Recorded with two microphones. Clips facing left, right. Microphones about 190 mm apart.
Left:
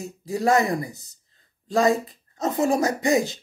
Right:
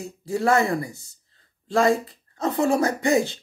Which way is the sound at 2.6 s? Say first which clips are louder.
Right 1 dB; 30° right (ahead or behind).